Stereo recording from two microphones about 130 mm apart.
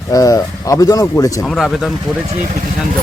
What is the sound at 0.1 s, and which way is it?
Speech, 30° left (ahead or behind).